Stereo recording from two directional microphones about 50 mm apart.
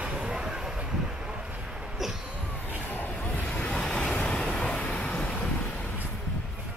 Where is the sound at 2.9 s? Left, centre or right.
Left.